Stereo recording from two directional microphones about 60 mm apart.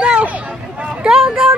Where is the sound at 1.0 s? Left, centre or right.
Centre.